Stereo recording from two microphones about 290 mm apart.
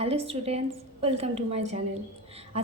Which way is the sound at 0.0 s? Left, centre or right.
Centre.